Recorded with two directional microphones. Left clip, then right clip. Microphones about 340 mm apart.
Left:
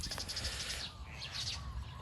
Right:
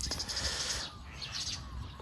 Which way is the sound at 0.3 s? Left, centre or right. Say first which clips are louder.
Right 8 dB; centre.